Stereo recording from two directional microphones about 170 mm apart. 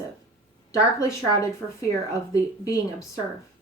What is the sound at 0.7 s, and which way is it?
Speech, 20° left (ahead or behind).